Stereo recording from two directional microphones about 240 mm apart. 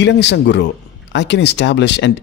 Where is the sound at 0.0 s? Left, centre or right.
Left.